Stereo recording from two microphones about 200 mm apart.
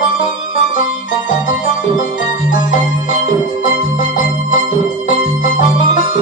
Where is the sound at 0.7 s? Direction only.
40° left (ahead or behind).